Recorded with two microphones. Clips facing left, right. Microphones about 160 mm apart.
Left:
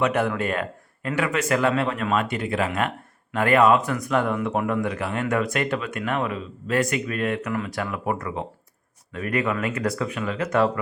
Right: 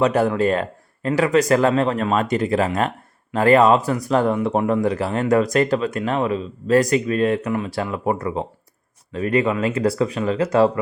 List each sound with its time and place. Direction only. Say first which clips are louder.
0.0 s speech: right 5 dB; 35° right (ahead or behind)